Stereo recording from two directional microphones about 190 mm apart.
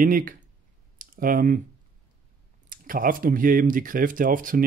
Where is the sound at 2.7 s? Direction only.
45° right (ahead or behind).